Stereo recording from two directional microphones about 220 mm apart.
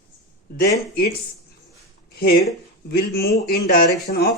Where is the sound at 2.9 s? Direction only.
45° left (ahead or behind).